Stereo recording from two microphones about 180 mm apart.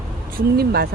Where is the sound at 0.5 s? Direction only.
60° right (ahead or behind).